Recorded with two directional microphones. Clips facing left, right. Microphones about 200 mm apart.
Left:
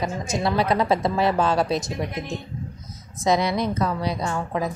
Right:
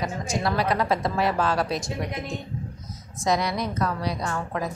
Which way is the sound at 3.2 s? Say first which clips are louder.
Left 3 dB; 25° left (ahead or behind).